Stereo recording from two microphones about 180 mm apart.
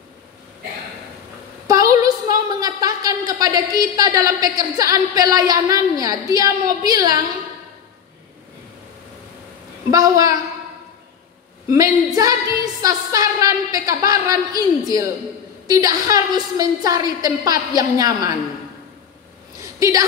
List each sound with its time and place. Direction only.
1.7 s a woman's voice: 20° right (ahead or behind)
9.8 s a woman's voice: 20° right (ahead or behind)
11.7 s a woman's voice: 20° right (ahead or behind)
19.6 s a sound: 20° right (ahead or behind)